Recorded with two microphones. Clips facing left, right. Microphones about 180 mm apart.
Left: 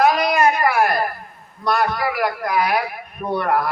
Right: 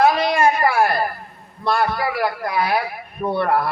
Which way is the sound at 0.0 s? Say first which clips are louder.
Even; 30° right (ahead or behind).